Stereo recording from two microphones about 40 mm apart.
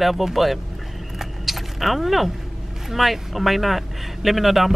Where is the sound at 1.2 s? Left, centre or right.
Centre.